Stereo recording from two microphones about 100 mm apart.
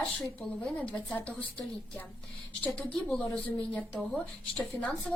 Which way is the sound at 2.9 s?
5° left (ahead or behind).